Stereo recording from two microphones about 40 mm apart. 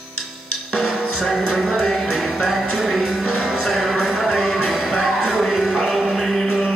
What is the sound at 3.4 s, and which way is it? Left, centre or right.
Music, centre.